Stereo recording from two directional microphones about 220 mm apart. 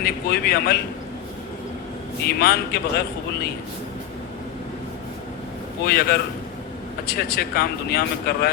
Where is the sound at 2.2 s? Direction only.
45° left (ahead or behind).